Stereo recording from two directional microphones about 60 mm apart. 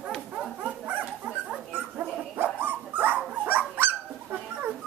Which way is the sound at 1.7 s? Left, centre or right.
Right.